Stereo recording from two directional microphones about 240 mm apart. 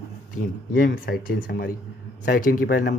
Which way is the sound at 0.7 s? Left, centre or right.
Left.